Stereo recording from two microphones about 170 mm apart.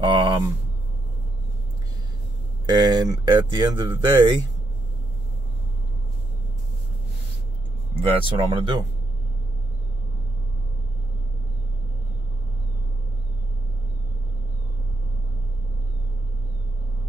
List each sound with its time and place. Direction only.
0.0 s a sound: 25° right (ahead or behind)
2.7 s speech: 25° right (ahead or behind)
8.1 s speech: 30° right (ahead or behind)